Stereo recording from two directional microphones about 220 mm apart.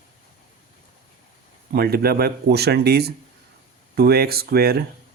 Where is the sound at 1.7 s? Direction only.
45° right (ahead or behind).